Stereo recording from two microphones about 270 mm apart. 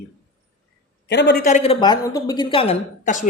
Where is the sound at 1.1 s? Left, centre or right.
Left.